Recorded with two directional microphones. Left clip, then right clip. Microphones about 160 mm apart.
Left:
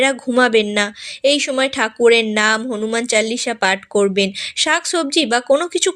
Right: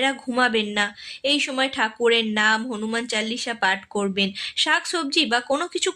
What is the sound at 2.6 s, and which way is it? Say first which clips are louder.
Speech: left 7 dB; 25° left (ahead or behind).